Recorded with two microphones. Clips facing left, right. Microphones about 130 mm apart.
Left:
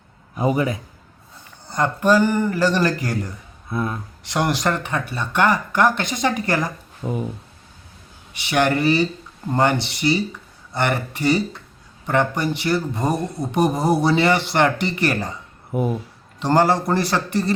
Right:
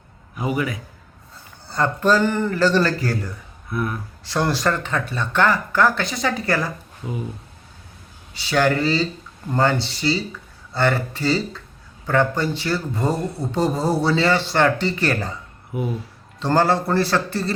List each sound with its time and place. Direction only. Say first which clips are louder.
0.3 s a man's voice: left 4 dB; 30° left (ahead or behind)
1.6 s speech: left 1 dB; 15° left (ahead or behind)
8.3 s speech: even; 20° left (ahead or behind)
15.7 s speech: left 4 dB; 45° left (ahead or behind)
16.4 s speech: left 1 dB; 15° left (ahead or behind)